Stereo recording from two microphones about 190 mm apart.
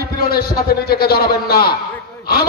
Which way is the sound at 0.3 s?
55° left (ahead or behind).